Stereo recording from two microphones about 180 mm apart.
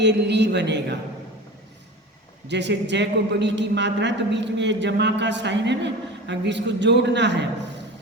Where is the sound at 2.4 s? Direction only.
75° right (ahead or behind).